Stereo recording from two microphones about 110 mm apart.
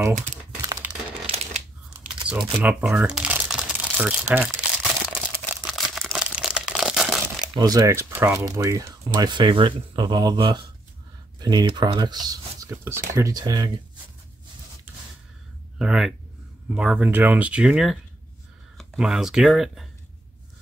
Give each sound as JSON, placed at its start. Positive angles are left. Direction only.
{"t": 0.8, "sound": "crumpling", "side_deg": -20}
{"t": 1.2, "sound": "shuffling cards", "side_deg": -65}
{"t": 2.3, "sound": "speech", "side_deg": -10}
{"t": 3.4, "sound": "crumpling", "side_deg": -5}
{"t": 7.5, "sound": "speech", "side_deg": -35}
{"t": 8.5, "sound": "speech", "side_deg": -30}
{"t": 9.1, "sound": "speech", "side_deg": -40}
{"t": 12.6, "sound": "speech", "side_deg": -25}
{"t": 15.8, "sound": "speech", "side_deg": -5}